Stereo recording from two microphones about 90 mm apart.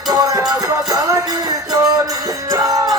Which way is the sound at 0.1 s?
45° right (ahead or behind).